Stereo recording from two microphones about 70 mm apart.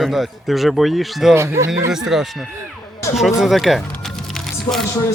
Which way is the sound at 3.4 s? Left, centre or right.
Centre.